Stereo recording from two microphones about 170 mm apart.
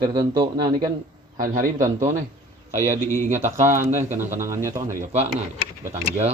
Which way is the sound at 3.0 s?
15° left (ahead or behind).